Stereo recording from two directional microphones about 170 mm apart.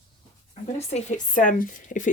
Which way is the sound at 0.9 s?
45° left (ahead or behind).